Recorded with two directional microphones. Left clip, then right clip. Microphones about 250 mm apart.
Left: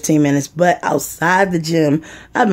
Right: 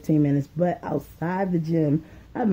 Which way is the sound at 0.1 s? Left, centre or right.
Centre.